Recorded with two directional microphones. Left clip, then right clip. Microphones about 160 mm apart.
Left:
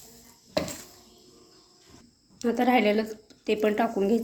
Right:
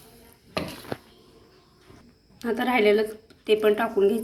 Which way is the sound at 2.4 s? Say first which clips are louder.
Even; 30° left (ahead or behind).